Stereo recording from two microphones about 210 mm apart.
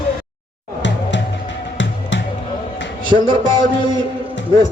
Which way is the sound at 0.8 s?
60° left (ahead or behind).